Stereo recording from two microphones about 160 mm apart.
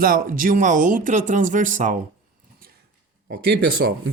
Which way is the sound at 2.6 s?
70° right (ahead or behind).